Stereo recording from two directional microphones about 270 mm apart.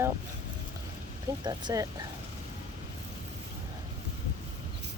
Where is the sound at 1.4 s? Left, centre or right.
Centre.